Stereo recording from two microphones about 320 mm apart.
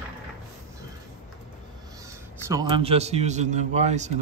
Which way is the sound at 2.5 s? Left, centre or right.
Centre.